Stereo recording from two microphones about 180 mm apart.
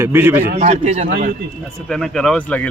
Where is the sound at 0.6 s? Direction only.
40° right (ahead or behind).